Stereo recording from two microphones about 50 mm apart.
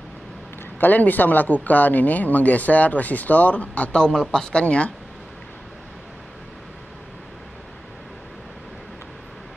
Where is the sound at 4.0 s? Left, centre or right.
Centre.